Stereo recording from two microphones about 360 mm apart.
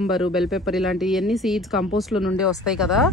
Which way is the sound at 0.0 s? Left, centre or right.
Centre.